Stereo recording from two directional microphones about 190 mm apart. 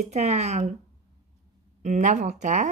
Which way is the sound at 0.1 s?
35° right (ahead or behind).